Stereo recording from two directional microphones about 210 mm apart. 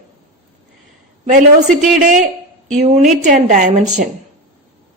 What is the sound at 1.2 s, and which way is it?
A woman's voice, 35° right (ahead or behind).